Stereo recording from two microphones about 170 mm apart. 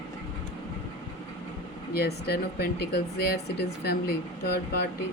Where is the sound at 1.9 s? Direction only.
65° left (ahead or behind).